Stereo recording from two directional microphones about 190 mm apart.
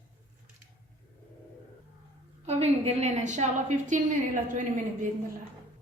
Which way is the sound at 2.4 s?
30° right (ahead or behind).